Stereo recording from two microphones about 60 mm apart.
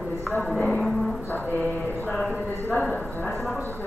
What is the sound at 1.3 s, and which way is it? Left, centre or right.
Speech, left.